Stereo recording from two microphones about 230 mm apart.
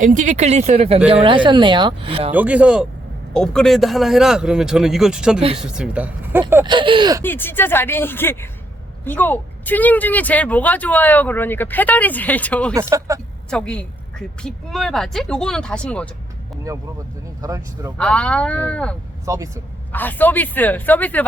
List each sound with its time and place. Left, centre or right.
0.0 s speech: right
2.3 s a woman's voice: centre
7.2 s speech: centre
12.7 s a man's voice: centre
13.5 s a woman's voice: centre
17.4 s a man's voice: centre
17.9 s a woman's voice: centre
19.2 s a man's voice: centre
19.9 s speech: centre